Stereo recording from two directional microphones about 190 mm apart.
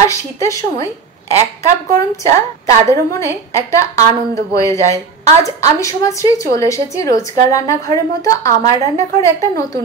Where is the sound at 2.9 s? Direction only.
15° left (ahead or behind).